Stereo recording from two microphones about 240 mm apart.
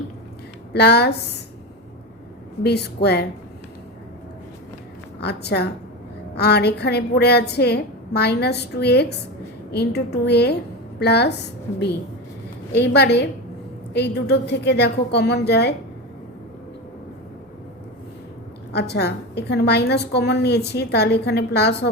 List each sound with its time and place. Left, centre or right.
0.7 s a woman's voice: left
2.6 s a woman's voice: left
5.2 s a woman's voice: left
12.7 s a woman's voice: left
18.7 s a woman's voice: left